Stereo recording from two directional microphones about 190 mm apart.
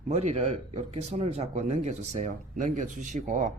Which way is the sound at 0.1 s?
35° right (ahead or behind).